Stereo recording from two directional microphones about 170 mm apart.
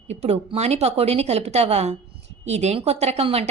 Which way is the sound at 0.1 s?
40° right (ahead or behind).